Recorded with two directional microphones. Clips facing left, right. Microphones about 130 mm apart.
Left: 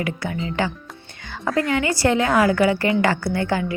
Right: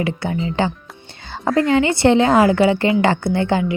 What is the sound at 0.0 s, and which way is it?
A woman's voice, 25° right (ahead or behind).